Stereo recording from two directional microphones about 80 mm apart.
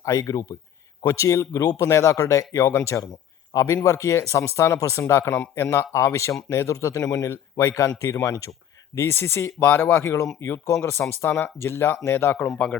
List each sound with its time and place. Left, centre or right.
0.0 s speech: left
12.5 s speech: centre